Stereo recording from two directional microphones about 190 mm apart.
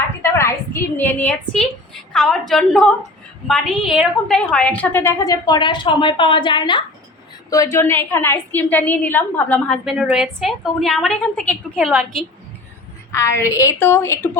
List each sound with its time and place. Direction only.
0.2 s a woman's voice: 15° left (ahead or behind)
9.8 s a woman's voice: 5° right (ahead or behind)
13.1 s a woman's voice: 15° left (ahead or behind)